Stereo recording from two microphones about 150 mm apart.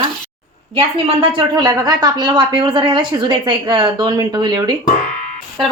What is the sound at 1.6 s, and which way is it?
A woman's voice, 25° right (ahead or behind).